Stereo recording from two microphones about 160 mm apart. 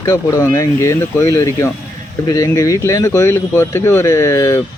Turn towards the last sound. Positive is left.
turn(degrees=20)  # may be behind; listen again after turning